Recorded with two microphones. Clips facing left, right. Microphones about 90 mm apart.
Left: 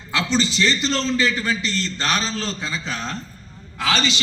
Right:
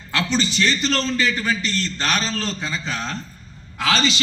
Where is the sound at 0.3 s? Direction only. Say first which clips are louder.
Left 1 dB; 5° right (ahead or behind).